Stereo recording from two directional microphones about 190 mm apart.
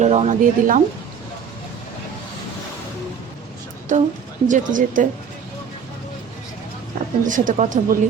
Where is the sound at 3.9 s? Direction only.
40° right (ahead or behind).